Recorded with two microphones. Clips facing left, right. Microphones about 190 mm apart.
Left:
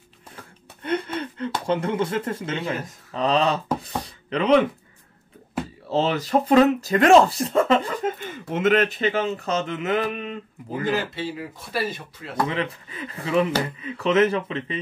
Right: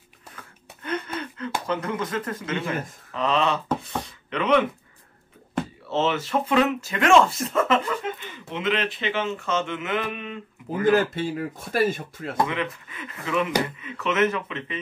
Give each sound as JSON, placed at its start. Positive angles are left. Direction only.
{"t": 0.4, "sound": "a sound", "side_deg": 30}
{"t": 1.7, "sound": "speech", "side_deg": 30}
{"t": 3.8, "sound": "a sound", "side_deg": 35}
{"t": 5.9, "sound": "speech", "side_deg": 35}
{"t": 10.8, "sound": "speech", "side_deg": -50}
{"t": 12.4, "sound": "speech", "side_deg": 35}